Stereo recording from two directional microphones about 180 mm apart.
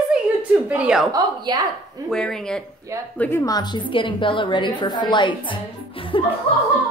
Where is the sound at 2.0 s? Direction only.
5° left (ahead or behind); by 6.3 s 30° left (ahead or behind).